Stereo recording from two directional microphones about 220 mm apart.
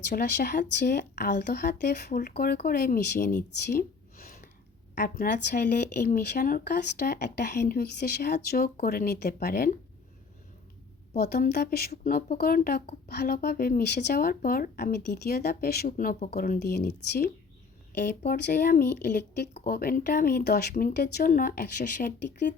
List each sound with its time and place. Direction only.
0.1 s speech: 45° left (ahead or behind)
11.2 s speech: 45° left (ahead or behind)